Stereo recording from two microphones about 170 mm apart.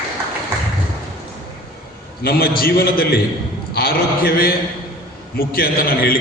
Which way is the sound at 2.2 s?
60° left (ahead or behind).